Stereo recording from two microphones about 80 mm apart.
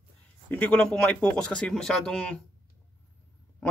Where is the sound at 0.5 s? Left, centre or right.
Centre.